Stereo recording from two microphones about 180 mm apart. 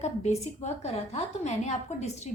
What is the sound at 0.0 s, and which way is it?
A woman's voice, 40° left (ahead or behind).